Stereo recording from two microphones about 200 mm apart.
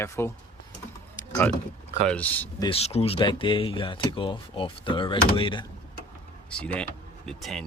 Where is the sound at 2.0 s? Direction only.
5° left (ahead or behind).